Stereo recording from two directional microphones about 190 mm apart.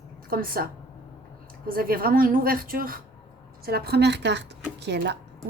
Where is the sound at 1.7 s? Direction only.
50° right (ahead or behind).